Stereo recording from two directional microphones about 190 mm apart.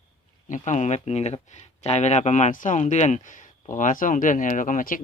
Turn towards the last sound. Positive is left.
turn(degrees=45)  # may be behind; listen again after turning